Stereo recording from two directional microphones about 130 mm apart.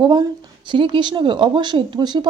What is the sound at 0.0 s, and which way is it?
Speech, 35° right (ahead or behind).